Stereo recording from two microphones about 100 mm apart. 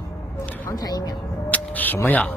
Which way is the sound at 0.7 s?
40° left (ahead or behind).